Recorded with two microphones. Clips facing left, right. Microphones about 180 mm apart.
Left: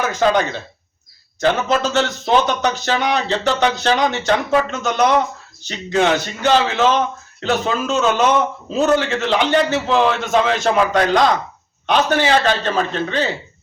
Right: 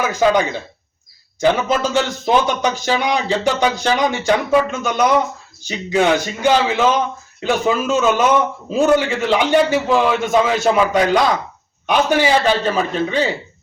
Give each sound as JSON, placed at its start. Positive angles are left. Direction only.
{"t": 0.0, "sound": "a man's voice", "side_deg": -10}